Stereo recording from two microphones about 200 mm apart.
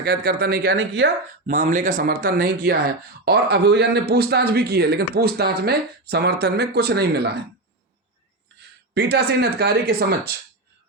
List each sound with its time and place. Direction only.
0.0 s speech: 50° right (ahead or behind)
1.5 s speech: 40° right (ahead or behind)
9.0 s speech: 55° right (ahead or behind)